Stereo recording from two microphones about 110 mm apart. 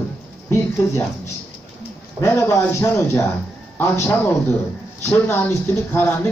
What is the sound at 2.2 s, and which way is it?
A man's voice, 25° left (ahead or behind).